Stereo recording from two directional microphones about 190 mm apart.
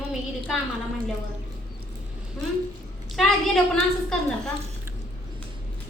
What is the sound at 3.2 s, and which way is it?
Speech, centre (ahead or behind).